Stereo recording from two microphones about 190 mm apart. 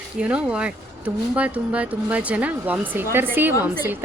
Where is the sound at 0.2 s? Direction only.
5° right (ahead or behind).